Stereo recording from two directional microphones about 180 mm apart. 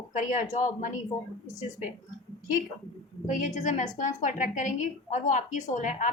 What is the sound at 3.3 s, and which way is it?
A woman's voice, 40° left (ahead or behind).